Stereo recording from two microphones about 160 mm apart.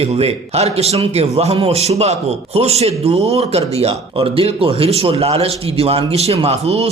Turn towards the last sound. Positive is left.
turn(degrees=-40)  # may be behind; listen again after turning